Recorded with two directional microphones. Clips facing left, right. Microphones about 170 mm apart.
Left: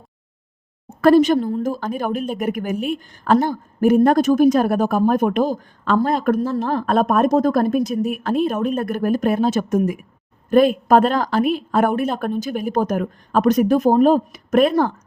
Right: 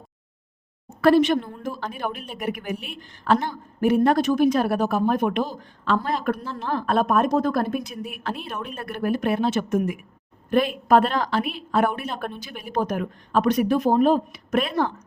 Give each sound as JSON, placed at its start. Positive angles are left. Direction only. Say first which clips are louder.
{"t": 1.0, "sound": "a woman's voice", "louder": "left 4 dB", "side_deg": 40}